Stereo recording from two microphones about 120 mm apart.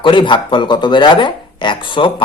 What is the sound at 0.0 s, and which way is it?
A man's voice, 45° left (ahead or behind).